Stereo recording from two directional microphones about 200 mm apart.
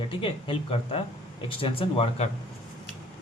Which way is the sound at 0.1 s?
25° left (ahead or behind).